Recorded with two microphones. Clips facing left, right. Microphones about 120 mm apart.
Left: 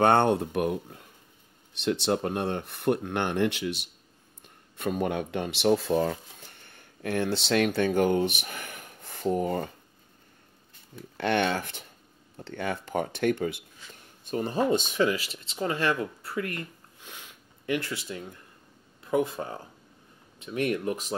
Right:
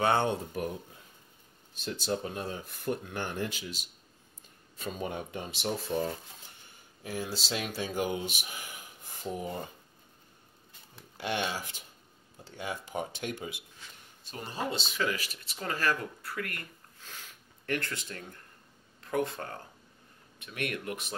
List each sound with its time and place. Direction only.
0.0 s speech: 60° left (ahead or behind); by 6.1 s 85° left
6.6 s speech: 65° left (ahead or behind)
11.1 s speech: 65° left (ahead or behind)
14.3 s speech: 45° left (ahead or behind)
15.0 s speech: 25° left (ahead or behind)
17.7 s speech: 10° left (ahead or behind)
20.4 s speech: 25° left (ahead or behind)